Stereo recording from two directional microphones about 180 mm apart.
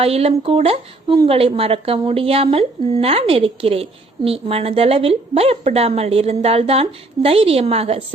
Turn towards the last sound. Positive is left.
turn(degrees=-35)  # may be behind; listen again after turning